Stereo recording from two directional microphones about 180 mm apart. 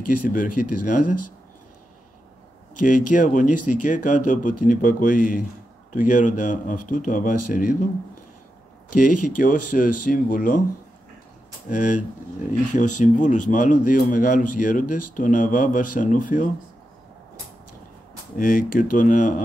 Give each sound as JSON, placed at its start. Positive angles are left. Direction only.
{"t": 0.1, "sound": "speech", "side_deg": 50}
{"t": 2.8, "sound": "speech", "side_deg": 45}
{"t": 8.9, "sound": "speech", "side_deg": 45}
{"t": 11.7, "sound": "speech", "side_deg": 45}
{"t": 18.3, "sound": "speech", "side_deg": 50}